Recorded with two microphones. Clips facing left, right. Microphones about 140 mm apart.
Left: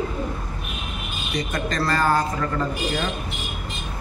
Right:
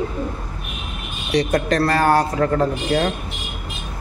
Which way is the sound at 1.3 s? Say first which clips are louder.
Right 8 dB; 70° right (ahead or behind).